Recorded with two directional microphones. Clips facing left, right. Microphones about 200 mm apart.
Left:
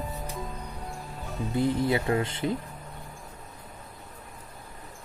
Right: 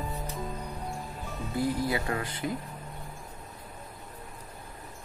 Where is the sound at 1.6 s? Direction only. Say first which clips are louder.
Left 4 dB; 25° left (ahead or behind).